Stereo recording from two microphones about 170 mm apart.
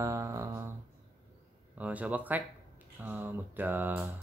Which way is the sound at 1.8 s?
10° right (ahead or behind).